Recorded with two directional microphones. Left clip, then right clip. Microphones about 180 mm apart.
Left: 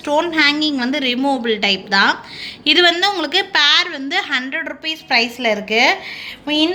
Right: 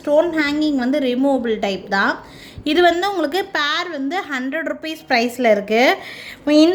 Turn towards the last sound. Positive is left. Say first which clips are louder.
# right 4 dB
turn(degrees=-65)  # may be behind; listen again after turning